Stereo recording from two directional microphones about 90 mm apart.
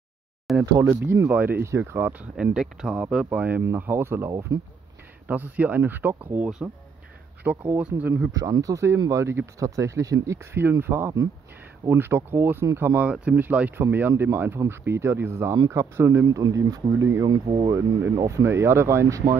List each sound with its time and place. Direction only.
0.5 s a sound: centre (ahead or behind)
0.8 s speech: 20° right (ahead or behind)
2.3 s speech: 10° right (ahead or behind); by 4.6 s 30° right (ahead or behind)
5.3 s speech: 20° right (ahead or behind)
8.4 s speech: 40° right (ahead or behind)
17.3 s speech: 75° right (ahead or behind)
17.6 s speech: 30° right (ahead or behind)